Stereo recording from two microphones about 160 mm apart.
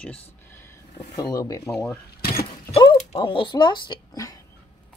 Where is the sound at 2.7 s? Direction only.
30° left (ahead or behind).